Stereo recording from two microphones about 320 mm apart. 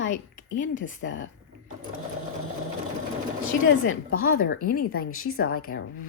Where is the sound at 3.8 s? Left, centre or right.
Left.